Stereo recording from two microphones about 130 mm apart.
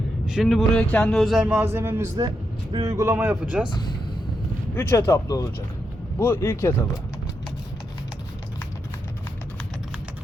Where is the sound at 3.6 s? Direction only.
35° left (ahead or behind).